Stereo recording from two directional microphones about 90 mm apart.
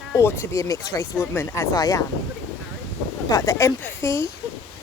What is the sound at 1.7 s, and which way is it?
Speech, 45° left (ahead or behind).